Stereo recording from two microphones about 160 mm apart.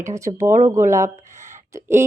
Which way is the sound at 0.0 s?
20° right (ahead or behind).